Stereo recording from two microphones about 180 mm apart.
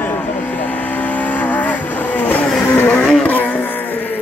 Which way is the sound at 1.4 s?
10° left (ahead or behind).